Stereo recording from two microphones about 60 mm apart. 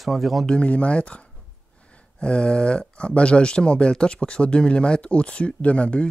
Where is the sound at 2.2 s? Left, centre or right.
Centre.